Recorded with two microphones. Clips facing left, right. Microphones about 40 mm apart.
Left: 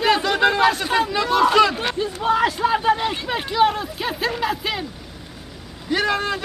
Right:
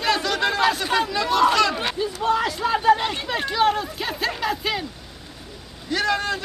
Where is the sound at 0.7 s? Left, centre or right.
Centre.